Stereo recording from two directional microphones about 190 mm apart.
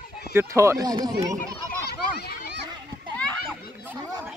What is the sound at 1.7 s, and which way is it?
Children playing, 55° left (ahead or behind).